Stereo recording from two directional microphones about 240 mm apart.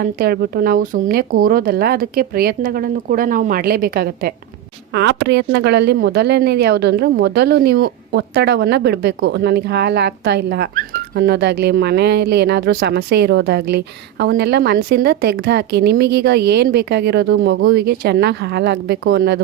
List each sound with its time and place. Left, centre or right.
0.2 s speech: right